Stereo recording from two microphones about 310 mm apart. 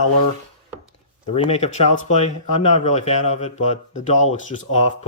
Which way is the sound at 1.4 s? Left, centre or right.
Centre.